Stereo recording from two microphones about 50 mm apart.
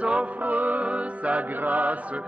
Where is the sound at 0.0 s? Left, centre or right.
Right.